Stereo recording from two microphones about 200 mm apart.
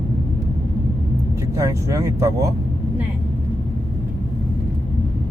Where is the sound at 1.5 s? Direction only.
15° right (ahead or behind).